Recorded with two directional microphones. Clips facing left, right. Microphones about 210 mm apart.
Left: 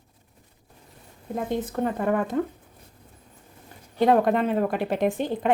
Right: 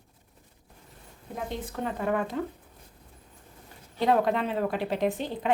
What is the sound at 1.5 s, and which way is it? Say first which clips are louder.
Speech: left 7 dB; 50° left (ahead or behind).